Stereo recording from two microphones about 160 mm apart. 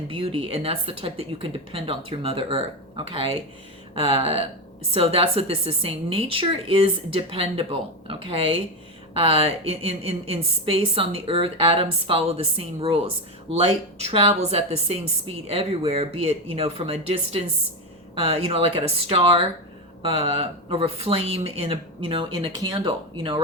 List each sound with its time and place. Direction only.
0.1 s a woman's voice: 35° right (ahead or behind)